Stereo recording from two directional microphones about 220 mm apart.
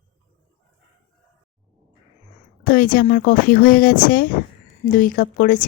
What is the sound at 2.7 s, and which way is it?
A woman's voice, 40° left (ahead or behind).